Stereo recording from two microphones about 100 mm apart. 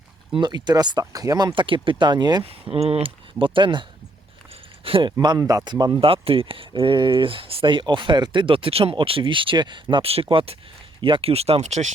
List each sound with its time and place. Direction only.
0.3 s speech: 45° right (ahead or behind)
1.5 s speech: 60° right (ahead or behind)
2.4 s speech: 75° right (ahead or behind); by 3.8 s 55° right (ahead or behind)
4.8 s speech: 65° right (ahead or behind)
5.1 s speech: 45° right (ahead or behind)
5.4 s speech: 35° right (ahead or behind)
6.0 s speech: 65° right (ahead or behind)
10.1 s speech: 70° right (ahead or behind); by 11.8 s 90° right